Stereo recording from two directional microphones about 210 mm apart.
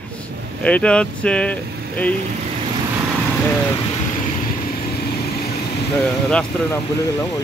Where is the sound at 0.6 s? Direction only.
5° left (ahead or behind).